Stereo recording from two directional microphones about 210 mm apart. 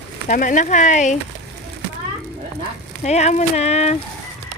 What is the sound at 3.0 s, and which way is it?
Speech, 35° left (ahead or behind).